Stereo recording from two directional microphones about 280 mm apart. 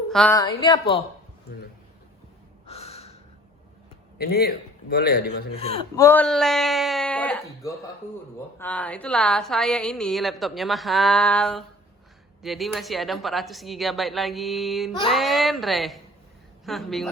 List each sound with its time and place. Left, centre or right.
0.1 s speech: centre
0.3 s a woman's voice: centre
2.6 s gasp: left
4.2 s a man's voice: left
6.0 s speech: centre
8.5 s a woman's voice: centre